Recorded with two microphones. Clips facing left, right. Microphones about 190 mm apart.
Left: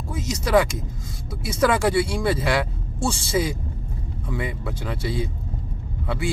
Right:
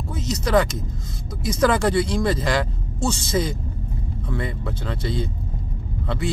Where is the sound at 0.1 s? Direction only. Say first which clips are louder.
Even; 10° left (ahead or behind).